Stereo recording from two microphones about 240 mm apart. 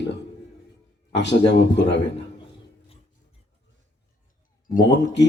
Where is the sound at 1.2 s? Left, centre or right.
Left.